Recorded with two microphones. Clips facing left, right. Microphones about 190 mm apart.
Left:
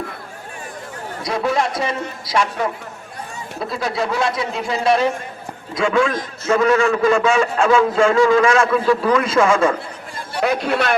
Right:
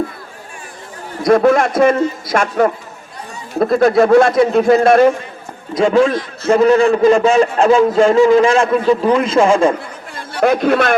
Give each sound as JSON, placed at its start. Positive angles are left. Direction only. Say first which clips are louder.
{"t": 1.2, "sound": "a man's voice", "louder": "right 9 dB", "side_deg": -50}
{"t": 5.7, "sound": "a man's voice", "louder": "right 6 dB", "side_deg": -35}
{"t": 10.4, "sound": "a man's voice", "louder": "right 6 dB", "side_deg": -50}